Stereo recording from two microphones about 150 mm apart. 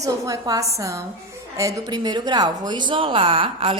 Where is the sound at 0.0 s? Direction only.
25° right (ahead or behind).